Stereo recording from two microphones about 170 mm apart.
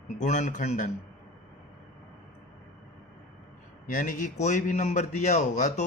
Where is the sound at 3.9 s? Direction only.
50° left (ahead or behind).